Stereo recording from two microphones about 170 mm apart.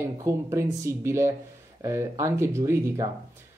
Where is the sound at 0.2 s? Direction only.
15° right (ahead or behind).